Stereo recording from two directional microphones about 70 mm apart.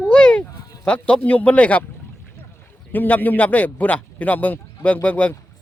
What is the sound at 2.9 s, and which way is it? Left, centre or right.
A man's voice, left.